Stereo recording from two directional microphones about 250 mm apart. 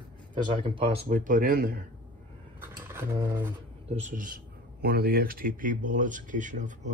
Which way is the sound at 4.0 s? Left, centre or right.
Right.